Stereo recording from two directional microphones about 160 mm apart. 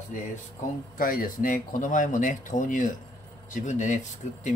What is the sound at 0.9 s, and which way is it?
Speech, 60° left (ahead or behind).